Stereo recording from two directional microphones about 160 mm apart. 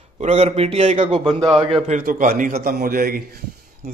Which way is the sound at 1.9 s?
60° right (ahead or behind).